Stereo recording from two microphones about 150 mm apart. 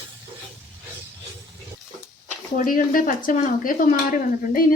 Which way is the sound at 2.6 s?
65° left (ahead or behind).